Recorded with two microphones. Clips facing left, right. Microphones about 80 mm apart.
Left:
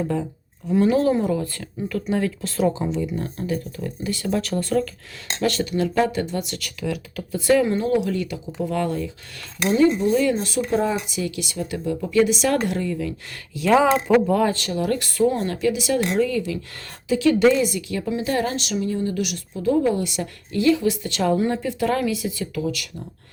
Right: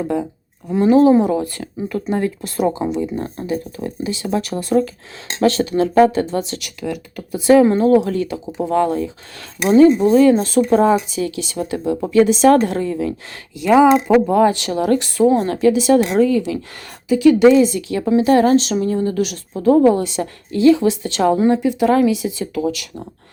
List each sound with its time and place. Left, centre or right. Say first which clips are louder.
0.0 s a woman's voice: right 4 dB; centre
5.4 s a woman's voice: right 7 dB; right
6.7 s speech: right 1 dB; centre
7.3 s a woman's voice: right 6 dB; right
7.6 s a woman's voice: right 8 dB; right
9.6 s a woman's voice: right 7 dB; right
13.6 s a woman's voice: right 5 dB; centre; by 15.4 s right
15.4 s a woman's voice: right 7 dB; right
17.1 s speech: right 6 dB; centre
17.7 s a woman's voice: right 7 dB; right
19.9 s a woman's voice: right 6 dB; right